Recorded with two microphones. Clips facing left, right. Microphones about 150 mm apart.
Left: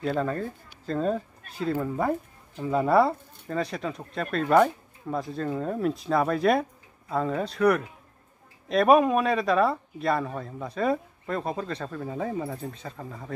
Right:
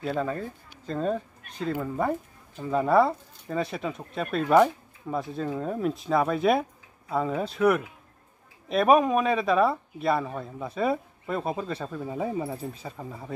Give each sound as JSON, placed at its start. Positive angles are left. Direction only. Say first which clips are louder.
{"t": 0.0, "sound": "speech", "louder": "left 2 dB", "side_deg": -5}